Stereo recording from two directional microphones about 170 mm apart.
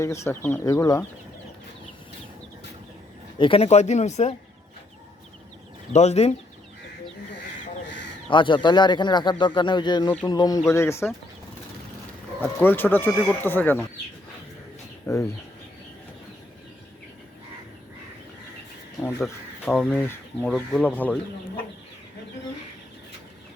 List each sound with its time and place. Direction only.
0.0 s speech: 15° left (ahead or behind)
3.3 s speech: 30° left (ahead or behind)
5.9 s speech: 40° left (ahead or behind)
8.3 s speech: 30° left (ahead or behind)
12.4 s speech: 10° left (ahead or behind)
15.0 s speech: 15° left (ahead or behind)
19.2 s speech: 5° left (ahead or behind)